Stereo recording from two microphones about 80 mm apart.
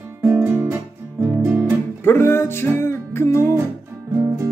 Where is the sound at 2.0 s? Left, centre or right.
Left.